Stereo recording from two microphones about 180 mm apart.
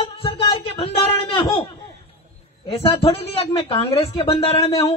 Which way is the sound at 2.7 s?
30° left (ahead or behind).